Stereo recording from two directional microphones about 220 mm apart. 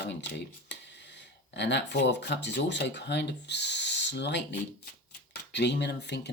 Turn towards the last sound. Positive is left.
turn(degrees=50)  # may be behind; listen again after turning